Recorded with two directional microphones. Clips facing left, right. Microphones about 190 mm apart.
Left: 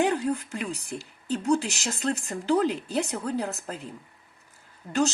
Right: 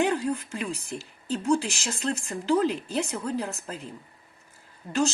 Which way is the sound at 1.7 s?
35° left (ahead or behind).